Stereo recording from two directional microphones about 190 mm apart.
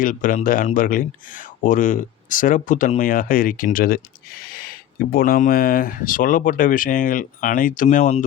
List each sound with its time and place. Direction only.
0.0 s speech: 45° left (ahead or behind)